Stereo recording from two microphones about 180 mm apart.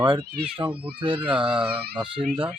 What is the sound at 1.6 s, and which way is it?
Speech, 30° right (ahead or behind).